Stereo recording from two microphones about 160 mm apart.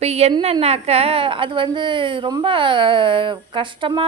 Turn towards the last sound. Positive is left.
turn(degrees=-30)  # may be behind; listen again after turning